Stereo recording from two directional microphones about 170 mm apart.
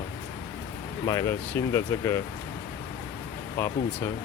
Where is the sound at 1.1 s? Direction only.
20° left (ahead or behind).